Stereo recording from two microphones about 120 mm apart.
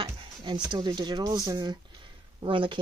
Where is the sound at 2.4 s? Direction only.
45° right (ahead or behind).